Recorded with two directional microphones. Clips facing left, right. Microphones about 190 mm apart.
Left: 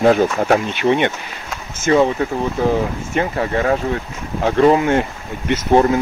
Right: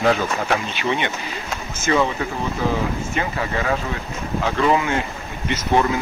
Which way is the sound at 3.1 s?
50° left (ahead or behind).